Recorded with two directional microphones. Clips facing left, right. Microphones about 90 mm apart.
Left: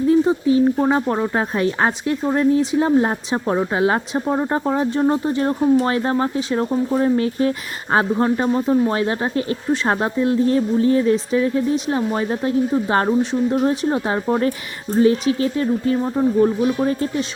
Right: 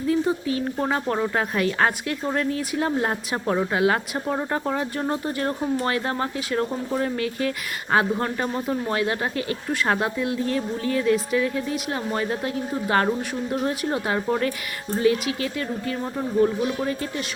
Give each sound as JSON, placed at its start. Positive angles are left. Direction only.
{"t": 0.1, "sound": "speech", "side_deg": 25}